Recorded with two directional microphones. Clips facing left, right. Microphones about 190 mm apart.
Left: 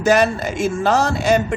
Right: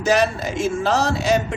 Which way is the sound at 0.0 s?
50° left (ahead or behind).